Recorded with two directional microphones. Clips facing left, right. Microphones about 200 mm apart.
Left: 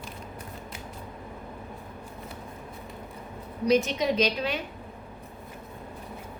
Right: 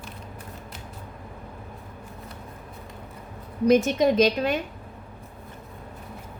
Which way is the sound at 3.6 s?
50° right (ahead or behind).